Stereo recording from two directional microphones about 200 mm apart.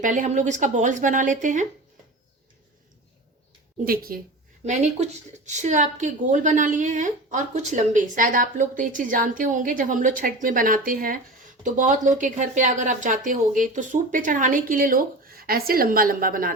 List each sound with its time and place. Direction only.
0.0 s a woman's voice: 40° right (ahead or behind)
3.8 s speech: 50° right (ahead or behind)
4.6 s a woman's voice: 35° right (ahead or behind)